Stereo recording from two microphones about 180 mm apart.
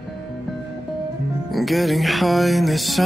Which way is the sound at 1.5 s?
Centre (ahead or behind).